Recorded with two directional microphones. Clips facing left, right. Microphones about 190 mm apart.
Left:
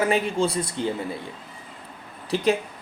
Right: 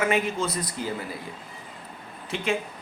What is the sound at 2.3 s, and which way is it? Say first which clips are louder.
Speech: left 6 dB; 40° left (ahead or behind).